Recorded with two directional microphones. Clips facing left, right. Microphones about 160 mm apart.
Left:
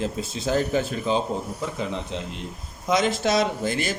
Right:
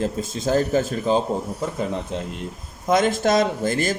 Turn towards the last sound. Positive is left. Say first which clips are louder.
# right 3 dB
turn(degrees=-45)  # may be behind; listen again after turning